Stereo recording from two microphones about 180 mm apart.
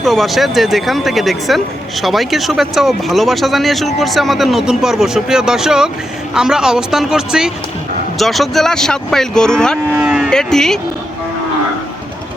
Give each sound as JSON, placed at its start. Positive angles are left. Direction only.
{"t": 0.0, "sound": "speech", "side_deg": 0}